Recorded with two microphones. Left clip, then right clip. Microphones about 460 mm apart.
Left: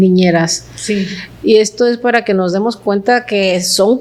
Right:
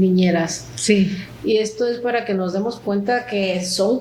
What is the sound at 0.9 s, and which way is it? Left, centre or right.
Speech, right.